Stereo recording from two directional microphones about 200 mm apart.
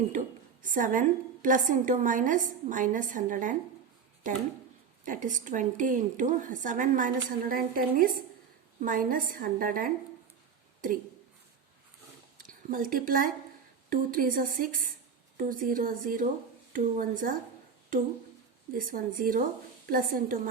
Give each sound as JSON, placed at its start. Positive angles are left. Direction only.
{"t": 0.1, "sound": "a woman's voice", "side_deg": -40}
{"t": 5.0, "sound": "a woman's voice", "side_deg": -40}
{"t": 12.4, "sound": "a woman's voice", "side_deg": -45}
{"t": 18.8, "sound": "a woman's voice", "side_deg": -45}